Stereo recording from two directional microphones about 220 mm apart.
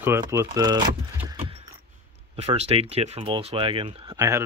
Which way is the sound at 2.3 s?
30° right (ahead or behind).